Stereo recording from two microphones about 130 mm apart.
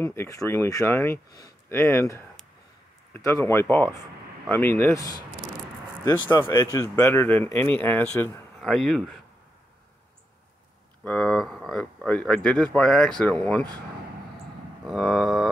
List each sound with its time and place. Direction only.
0.0 s speech: 20° left (ahead or behind)
8.5 s speech: 5° left (ahead or behind)
11.1 s speech: 5° left (ahead or behind)
14.9 s speech: centre (ahead or behind)